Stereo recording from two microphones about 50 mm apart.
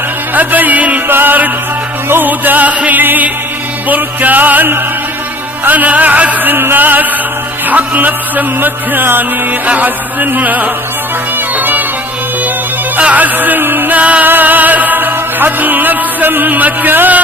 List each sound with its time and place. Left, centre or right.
0.3 s music: right
1.0 s music: right
13.0 s music: right